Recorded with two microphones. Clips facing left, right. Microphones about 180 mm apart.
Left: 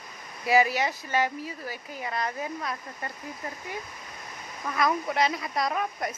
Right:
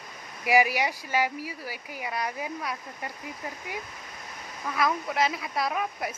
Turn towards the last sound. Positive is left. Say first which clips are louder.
# left 1 dB
turn(degrees=-5)  # may be behind; listen again after turning